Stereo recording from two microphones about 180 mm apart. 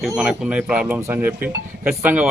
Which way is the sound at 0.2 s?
5° right (ahead or behind).